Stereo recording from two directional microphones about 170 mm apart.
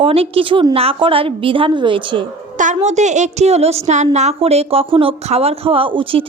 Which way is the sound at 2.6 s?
45° right (ahead or behind).